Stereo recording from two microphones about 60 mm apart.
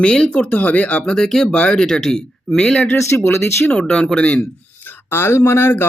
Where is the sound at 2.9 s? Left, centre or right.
Left.